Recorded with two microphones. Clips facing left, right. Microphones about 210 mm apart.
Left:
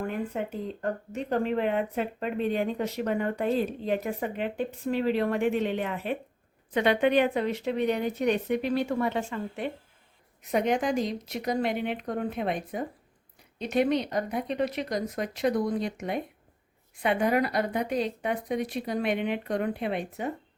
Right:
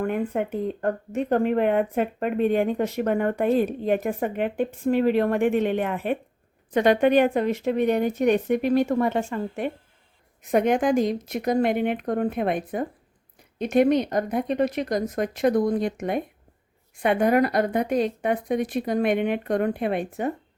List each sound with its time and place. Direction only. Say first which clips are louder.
0.0 s speech: right 6 dB; 55° right (ahead or behind)